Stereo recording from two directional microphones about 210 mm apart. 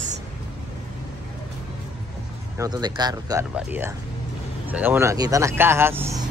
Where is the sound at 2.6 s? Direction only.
20° right (ahead or behind).